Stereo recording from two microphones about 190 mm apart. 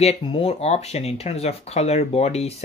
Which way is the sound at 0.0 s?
30° left (ahead or behind).